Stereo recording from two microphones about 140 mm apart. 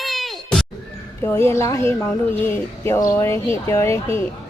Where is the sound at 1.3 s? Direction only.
20° left (ahead or behind).